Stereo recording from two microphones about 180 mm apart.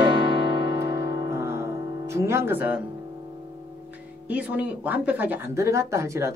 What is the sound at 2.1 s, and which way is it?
Speech, 15° right (ahead or behind).